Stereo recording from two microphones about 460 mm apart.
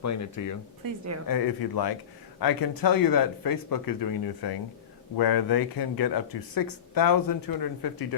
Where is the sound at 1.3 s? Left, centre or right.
Left.